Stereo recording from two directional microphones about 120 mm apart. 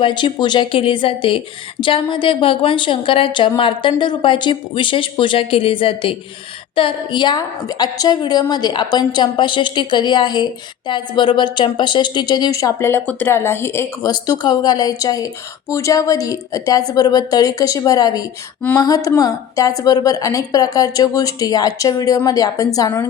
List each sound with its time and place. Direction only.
0.0 s a woman's voice: 40° left (ahead or behind); by 14.1 s 20° left (ahead or behind)
14.1 s a woman's voice: 30° left (ahead or behind)